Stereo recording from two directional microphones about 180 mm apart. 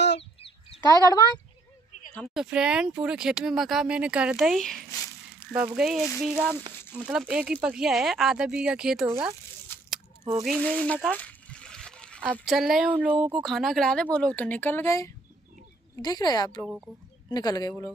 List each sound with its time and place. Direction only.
0.8 s a woman's voice: 20° left (ahead or behind)
2.1 s speech: 5° right (ahead or behind)
4.9 s a sound: 15° left (ahead or behind)
5.8 s speech: 5° right (ahead or behind)
10.4 s speech: 5° left (ahead or behind)
11.1 s a sound: 5° left (ahead or behind)
12.3 s a woman's voice: centre (ahead or behind); by 16.6 s 20° left (ahead or behind)
16.6 s speech: 5° right (ahead or behind)
17.3 s a woman's voice: 20° left (ahead or behind)